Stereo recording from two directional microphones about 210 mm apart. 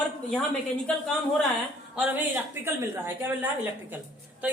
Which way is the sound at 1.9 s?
5° right (ahead or behind).